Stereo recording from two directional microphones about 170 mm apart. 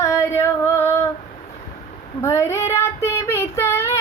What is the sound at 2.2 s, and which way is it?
Child singing, 15° left (ahead or behind).